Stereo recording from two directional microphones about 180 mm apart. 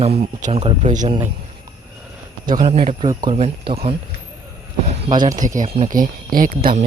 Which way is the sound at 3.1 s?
20° right (ahead or behind).